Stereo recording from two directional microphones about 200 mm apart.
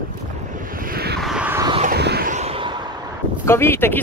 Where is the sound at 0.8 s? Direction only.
50° right (ahead or behind).